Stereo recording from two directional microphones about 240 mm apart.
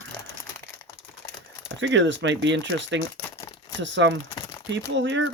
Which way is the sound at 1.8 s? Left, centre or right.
Right.